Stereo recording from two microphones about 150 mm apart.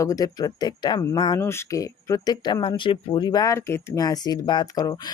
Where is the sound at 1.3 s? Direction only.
15° left (ahead or behind).